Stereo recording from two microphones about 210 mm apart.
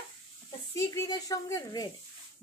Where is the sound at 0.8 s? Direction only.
15° left (ahead or behind).